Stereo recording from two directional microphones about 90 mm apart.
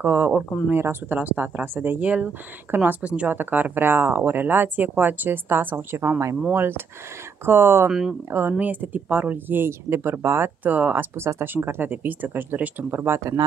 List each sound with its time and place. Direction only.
0.0 s speech: 25° right (ahead or behind)